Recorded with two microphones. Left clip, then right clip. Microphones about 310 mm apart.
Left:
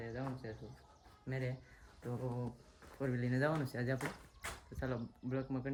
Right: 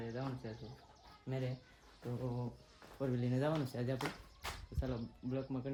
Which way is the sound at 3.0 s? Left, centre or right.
Centre.